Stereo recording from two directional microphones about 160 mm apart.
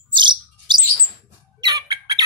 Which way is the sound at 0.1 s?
30° right (ahead or behind).